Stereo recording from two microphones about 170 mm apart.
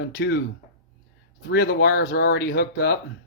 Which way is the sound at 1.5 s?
65° left (ahead or behind).